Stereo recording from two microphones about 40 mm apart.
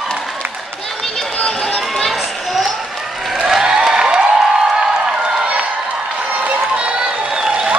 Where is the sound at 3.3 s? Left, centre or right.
Centre.